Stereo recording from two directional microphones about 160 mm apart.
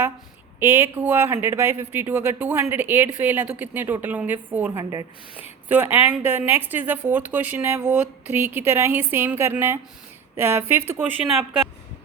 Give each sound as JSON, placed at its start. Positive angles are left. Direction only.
{"t": 0.6, "sound": "a woman's voice", "side_deg": -15}